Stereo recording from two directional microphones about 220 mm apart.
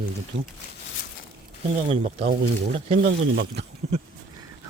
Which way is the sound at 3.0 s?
55° right (ahead or behind).